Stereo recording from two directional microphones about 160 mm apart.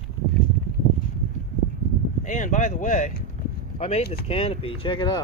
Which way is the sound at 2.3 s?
50° left (ahead or behind).